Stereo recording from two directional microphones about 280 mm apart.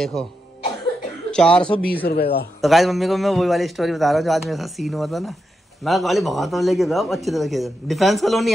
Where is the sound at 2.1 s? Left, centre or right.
Left.